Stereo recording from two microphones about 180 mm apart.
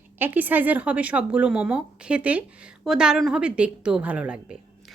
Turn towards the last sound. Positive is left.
turn(degrees=-5)  # may be behind; listen again after turning